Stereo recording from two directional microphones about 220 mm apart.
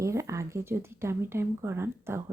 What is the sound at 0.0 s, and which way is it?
Speech, 15° right (ahead or behind).